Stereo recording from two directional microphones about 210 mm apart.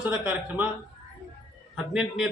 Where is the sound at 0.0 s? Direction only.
5° right (ahead or behind).